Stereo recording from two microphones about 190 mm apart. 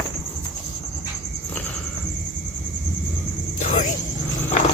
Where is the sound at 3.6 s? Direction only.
40° left (ahead or behind).